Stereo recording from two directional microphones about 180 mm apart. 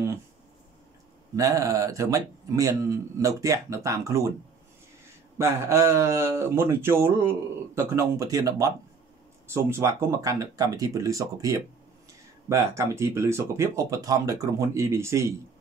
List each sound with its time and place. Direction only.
1.3 s speech: 20° right (ahead or behind)
5.4 s speech: 15° right (ahead or behind)